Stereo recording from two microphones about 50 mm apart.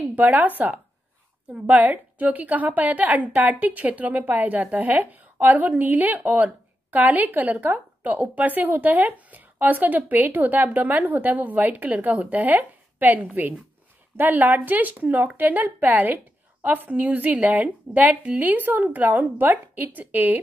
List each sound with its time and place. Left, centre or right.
0.1 s speech: right